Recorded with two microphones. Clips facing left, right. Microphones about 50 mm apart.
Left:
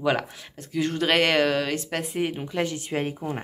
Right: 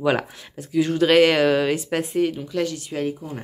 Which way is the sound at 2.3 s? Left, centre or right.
Left.